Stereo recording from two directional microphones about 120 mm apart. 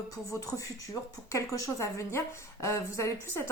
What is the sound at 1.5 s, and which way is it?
Speech, 25° left (ahead or behind).